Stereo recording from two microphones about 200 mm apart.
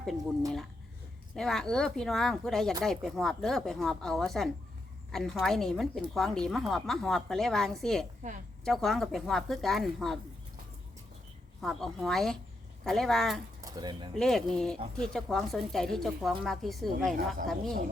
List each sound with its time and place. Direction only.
1.4 s a woman's voice: centre (ahead or behind)
8.2 s speech: 35° right (ahead or behind)
8.6 s a woman's voice: centre (ahead or behind)
11.6 s a woman's voice: centre (ahead or behind)
13.6 s speech: 20° right (ahead or behind)
14.2 s a woman's voice: centre (ahead or behind)